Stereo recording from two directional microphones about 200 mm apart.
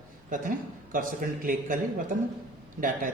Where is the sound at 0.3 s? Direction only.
40° right (ahead or behind).